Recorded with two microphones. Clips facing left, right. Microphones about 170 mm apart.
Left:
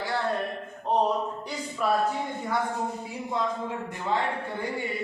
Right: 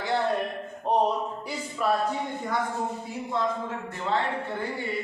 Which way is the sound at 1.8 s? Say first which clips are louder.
Even; centre (ahead or behind).